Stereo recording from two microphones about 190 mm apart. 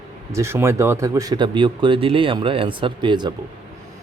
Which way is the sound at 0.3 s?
15° right (ahead or behind).